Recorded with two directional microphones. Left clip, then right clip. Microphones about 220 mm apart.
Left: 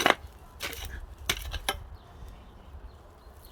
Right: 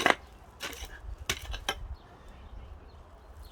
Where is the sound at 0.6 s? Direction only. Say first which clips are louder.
Left 3 dB; 20° left (ahead or behind).